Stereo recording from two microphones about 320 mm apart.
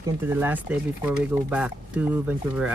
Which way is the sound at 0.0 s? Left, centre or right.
Centre.